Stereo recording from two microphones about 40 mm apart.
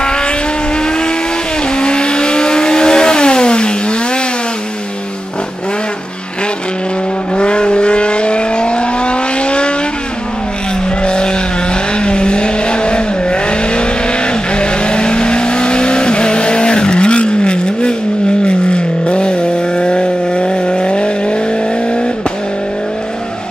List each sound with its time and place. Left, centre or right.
0.0 s vehicle: left
7.3 s vehicle: left
11.0 s vehicle: left